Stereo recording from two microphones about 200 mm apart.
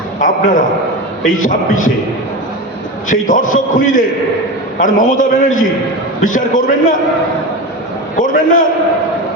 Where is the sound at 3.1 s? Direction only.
40° left (ahead or behind).